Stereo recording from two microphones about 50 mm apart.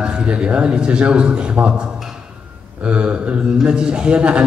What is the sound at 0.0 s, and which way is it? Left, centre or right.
A man's voice, right.